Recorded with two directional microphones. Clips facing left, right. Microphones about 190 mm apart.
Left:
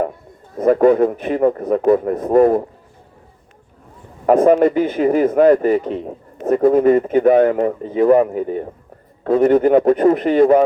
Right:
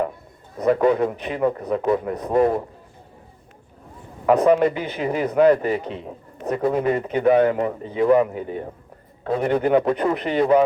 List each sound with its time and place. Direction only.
0.6 s speech: 50° left (ahead or behind)
4.3 s speech: 45° left (ahead or behind)